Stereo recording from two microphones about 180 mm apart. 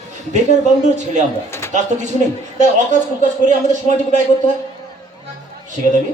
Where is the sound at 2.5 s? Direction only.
40° right (ahead or behind).